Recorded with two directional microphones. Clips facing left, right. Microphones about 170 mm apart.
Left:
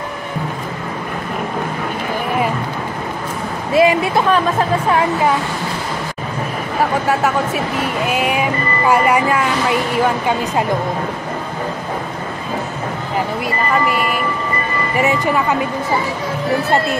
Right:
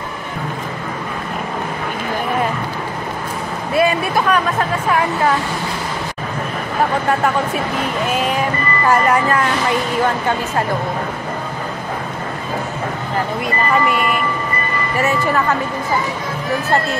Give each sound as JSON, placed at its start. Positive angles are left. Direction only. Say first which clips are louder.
{"t": 3.7, "sound": "speech", "louder": "left 3 dB", "side_deg": 20}
{"t": 8.1, "sound": "speech", "louder": "left 1 dB", "side_deg": 10}
{"t": 13.8, "sound": "speech", "louder": "even", "side_deg": 0}
{"t": 15.0, "sound": "speech", "louder": "left 1 dB", "side_deg": 15}